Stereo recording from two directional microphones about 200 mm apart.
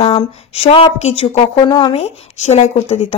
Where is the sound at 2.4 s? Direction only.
35° left (ahead or behind).